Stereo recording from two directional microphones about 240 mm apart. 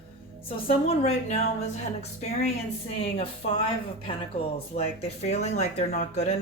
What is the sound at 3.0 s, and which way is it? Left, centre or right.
Speech, left.